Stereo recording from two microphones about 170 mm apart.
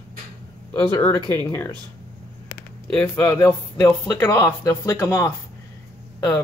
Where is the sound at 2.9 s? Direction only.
15° left (ahead or behind).